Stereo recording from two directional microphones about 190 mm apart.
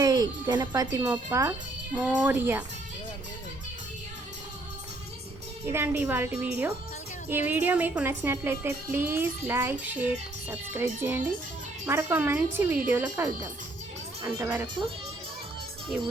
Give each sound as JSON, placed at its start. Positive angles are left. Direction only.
{"t": 0.0, "sound": "speech", "side_deg": -20}
{"t": 5.6, "sound": "speech", "side_deg": -10}